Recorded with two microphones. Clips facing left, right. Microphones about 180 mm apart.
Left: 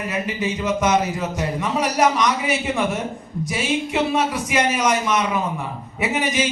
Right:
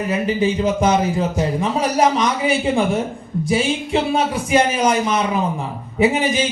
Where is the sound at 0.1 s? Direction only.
30° right (ahead or behind).